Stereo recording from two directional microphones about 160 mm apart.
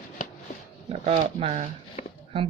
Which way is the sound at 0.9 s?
40° right (ahead or behind).